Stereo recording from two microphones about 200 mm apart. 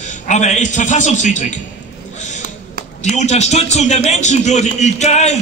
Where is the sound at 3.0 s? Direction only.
35° left (ahead or behind).